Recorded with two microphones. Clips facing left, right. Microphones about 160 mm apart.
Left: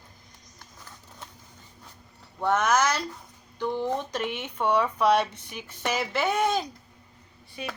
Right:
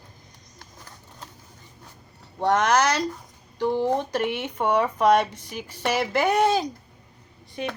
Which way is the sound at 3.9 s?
55° right (ahead or behind).